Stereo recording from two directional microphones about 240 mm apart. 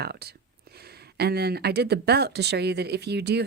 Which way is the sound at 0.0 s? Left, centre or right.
Right.